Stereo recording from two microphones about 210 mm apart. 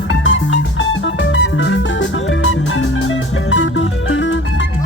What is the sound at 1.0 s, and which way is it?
Music, 60° left (ahead or behind).